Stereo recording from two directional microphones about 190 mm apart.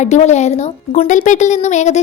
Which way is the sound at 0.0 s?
40° left (ahead or behind).